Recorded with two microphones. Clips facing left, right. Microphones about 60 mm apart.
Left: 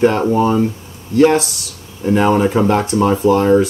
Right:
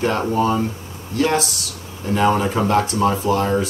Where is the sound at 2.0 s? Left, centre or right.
Centre.